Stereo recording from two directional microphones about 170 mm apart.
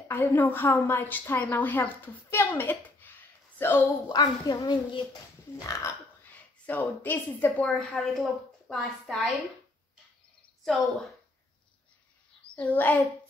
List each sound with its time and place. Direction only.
0.1 s a woman's voice: 10° left (ahead or behind)
6.6 s a woman's voice: 10° left (ahead or behind)
10.6 s speech: centre (ahead or behind)
12.5 s a woman's voice: 10° left (ahead or behind)